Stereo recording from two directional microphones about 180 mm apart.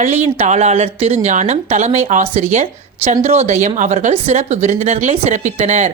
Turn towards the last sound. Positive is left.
turn(degrees=-40)  # may be behind; listen again after turning